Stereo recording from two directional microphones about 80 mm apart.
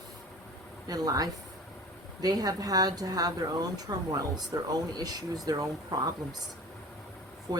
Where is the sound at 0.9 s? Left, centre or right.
Right.